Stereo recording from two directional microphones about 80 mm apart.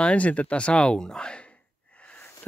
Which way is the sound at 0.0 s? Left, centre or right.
Centre.